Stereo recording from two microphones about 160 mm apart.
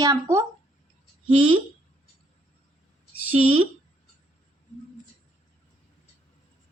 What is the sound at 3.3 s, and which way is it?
Speech, 35° right (ahead or behind).